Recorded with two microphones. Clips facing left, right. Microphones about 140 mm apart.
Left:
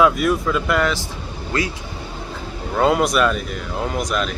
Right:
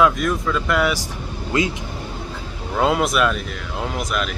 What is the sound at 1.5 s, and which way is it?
Speech, 20° right (ahead or behind).